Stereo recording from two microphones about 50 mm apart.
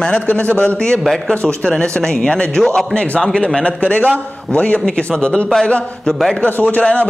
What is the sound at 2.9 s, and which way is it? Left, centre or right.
Speech, left.